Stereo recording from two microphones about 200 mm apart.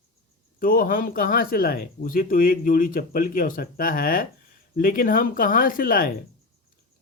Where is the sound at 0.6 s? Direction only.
45° left (ahead or behind).